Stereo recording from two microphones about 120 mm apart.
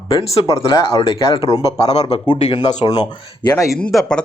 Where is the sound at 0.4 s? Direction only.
25° left (ahead or behind).